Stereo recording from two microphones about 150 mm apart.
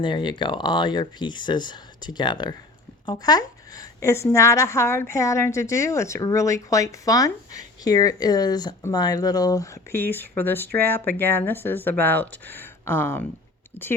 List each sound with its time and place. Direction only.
0.0 s a woman's voice: 30° left (ahead or behind); by 13.2 s 15° left (ahead or behind)